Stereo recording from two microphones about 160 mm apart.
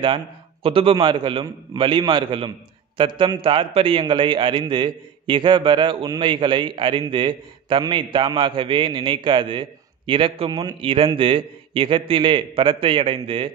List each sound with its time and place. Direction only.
0.0 s a man's voice: 35° right (ahead or behind)